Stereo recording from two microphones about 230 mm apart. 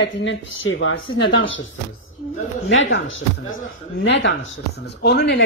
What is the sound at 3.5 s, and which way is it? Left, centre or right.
Speech, left.